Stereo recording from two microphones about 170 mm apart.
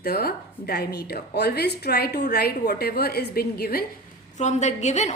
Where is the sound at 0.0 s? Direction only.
65° left (ahead or behind).